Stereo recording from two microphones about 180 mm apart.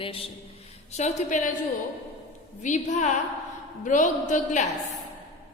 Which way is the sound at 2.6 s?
40° left (ahead or behind).